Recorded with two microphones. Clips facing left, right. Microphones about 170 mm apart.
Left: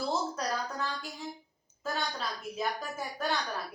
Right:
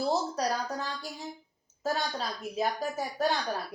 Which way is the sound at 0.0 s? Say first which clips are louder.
Right 4 dB; 40° right (ahead or behind).